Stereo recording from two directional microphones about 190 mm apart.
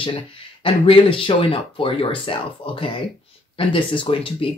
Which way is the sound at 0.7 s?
30° left (ahead or behind).